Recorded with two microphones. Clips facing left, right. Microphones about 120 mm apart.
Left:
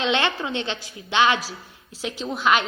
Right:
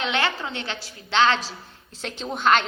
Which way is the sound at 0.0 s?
20° left (ahead or behind).